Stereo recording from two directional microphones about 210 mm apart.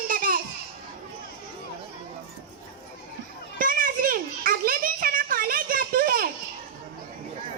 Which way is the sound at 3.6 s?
40° right (ahead or behind).